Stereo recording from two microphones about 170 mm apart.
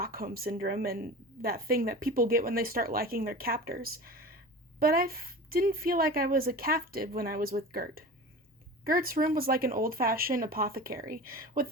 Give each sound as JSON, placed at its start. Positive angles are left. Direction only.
{"t": 0.0, "sound": "a woman's voice", "side_deg": -60}